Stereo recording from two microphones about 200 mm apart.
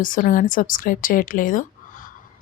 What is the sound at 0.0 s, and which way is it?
Speech, 45° left (ahead or behind).